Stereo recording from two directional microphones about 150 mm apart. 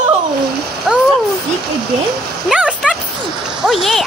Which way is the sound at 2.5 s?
5° right (ahead or behind).